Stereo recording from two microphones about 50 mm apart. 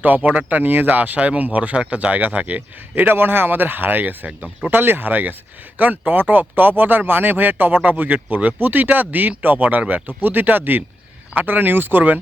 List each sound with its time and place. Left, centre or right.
0.0 s speech: right
4.3 s speech: right
4.7 s speech: right